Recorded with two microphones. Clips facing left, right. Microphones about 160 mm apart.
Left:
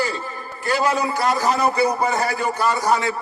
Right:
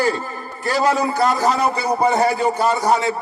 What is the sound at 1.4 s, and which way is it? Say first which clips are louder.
A man's voice: even; 30° right (ahead or behind).